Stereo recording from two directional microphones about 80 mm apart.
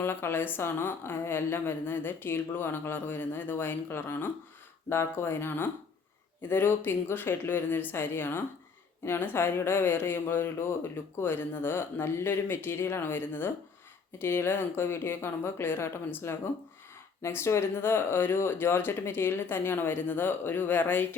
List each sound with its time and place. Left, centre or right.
0.0 s speech: left